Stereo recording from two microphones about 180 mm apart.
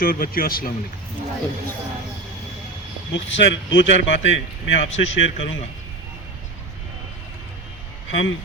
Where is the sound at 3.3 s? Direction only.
90° left.